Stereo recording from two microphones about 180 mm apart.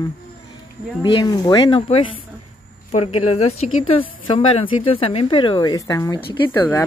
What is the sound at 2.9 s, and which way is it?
A woman's voice, 35° left (ahead or behind).